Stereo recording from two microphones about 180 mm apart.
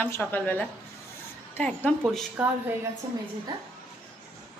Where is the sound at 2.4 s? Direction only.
5° right (ahead or behind).